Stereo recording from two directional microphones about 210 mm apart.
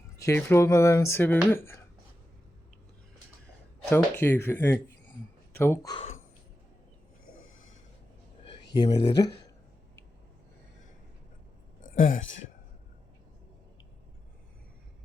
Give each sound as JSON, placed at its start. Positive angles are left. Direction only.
{"t": 0.2, "sound": "speech", "side_deg": 15}
{"t": 3.8, "sound": "speech", "side_deg": 10}
{"t": 9.0, "sound": "speech", "side_deg": 20}
{"t": 11.8, "sound": "a sound", "side_deg": 40}